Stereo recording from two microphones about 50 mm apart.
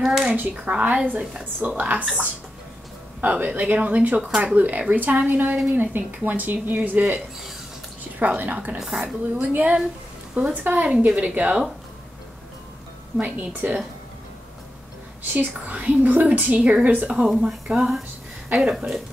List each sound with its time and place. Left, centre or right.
0.0 s speech: centre
0.4 s speech: right
3.2 s speech: right
8.7 s speech: centre
9.0 s a woman's voice: right
13.2 s speech: right
15.3 s a woman's voice: right
17.5 s speech: centre